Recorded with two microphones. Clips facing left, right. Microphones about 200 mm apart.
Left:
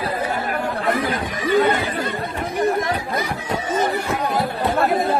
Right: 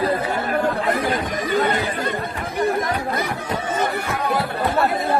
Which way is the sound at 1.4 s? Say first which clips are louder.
Left 5 dB; 45° right (ahead or behind).